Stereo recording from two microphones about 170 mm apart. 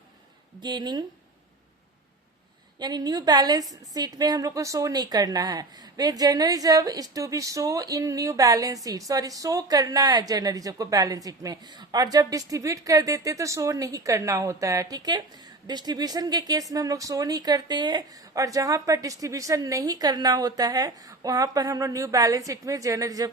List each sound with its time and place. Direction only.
0.6 s a woman's voice: 25° right (ahead or behind)
2.7 s a woman's voice: 25° right (ahead or behind)